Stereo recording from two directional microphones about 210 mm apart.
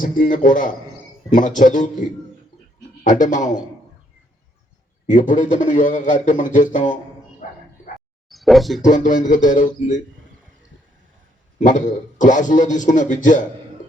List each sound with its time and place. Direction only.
0.0 s speech: 40° left (ahead or behind)
5.1 s speech: 35° left (ahead or behind)
7.4 s bow-wow: 40° left (ahead or behind)
8.3 s a sound: centre (ahead or behind)
8.8 s speech: 35° left (ahead or behind)
11.6 s speech: 35° left (ahead or behind)